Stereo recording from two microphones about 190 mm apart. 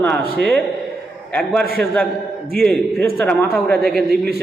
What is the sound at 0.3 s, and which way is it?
A man's voice, 10° left (ahead or behind).